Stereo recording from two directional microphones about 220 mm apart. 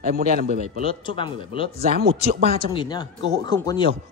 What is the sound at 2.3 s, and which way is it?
Speech, 45° right (ahead or behind).